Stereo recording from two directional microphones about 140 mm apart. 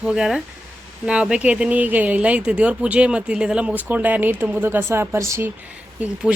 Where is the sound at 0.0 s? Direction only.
5° right (ahead or behind); by 5.5 s 20° right (ahead or behind).